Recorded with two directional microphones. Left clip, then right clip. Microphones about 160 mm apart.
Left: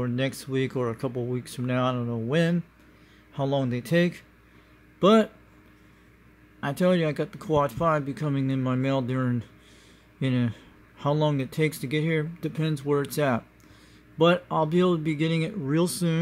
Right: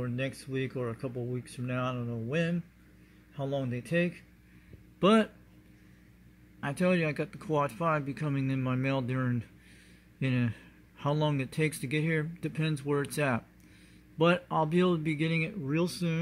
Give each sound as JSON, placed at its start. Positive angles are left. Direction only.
{"t": 0.0, "sound": "speech", "side_deg": 30}
{"t": 5.0, "sound": "speech", "side_deg": 10}
{"t": 6.6, "sound": "speech", "side_deg": 10}